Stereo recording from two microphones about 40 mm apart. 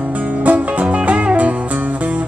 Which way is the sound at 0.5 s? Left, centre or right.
Right.